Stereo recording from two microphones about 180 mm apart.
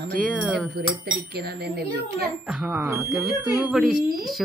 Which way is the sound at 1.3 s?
60° right (ahead or behind).